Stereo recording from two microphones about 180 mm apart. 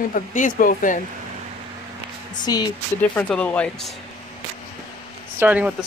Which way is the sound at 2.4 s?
25° left (ahead or behind).